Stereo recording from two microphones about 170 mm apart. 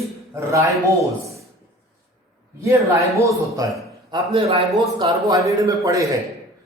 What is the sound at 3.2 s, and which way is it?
Speech, 20° right (ahead or behind).